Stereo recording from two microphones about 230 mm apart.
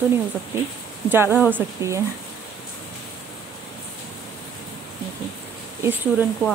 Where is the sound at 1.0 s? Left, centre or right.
Centre.